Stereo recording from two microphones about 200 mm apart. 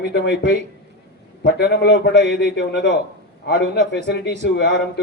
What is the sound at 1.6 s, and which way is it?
A man's voice, 55° left (ahead or behind).